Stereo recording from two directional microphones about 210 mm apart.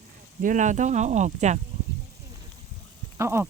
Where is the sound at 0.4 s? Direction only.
35° right (ahead or behind).